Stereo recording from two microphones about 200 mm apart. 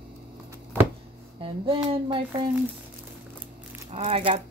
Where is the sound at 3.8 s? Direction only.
30° right (ahead or behind).